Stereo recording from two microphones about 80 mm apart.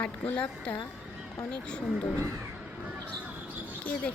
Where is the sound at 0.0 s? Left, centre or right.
Centre.